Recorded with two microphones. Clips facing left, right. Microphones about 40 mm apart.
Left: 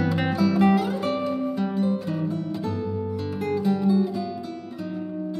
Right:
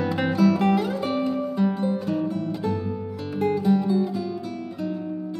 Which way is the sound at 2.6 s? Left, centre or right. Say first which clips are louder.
Right 1 dB; centre.